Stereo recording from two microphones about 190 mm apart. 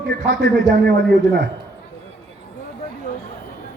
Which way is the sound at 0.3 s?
70° right (ahead or behind).